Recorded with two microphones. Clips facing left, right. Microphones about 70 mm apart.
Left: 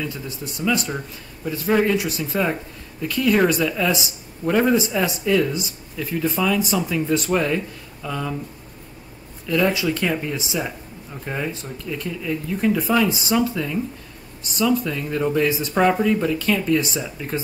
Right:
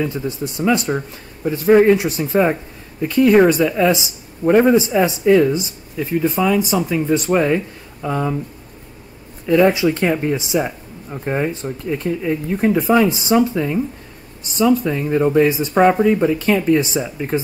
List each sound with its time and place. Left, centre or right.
0.0 s speech: right
9.5 s speech: right
14.9 s speech: right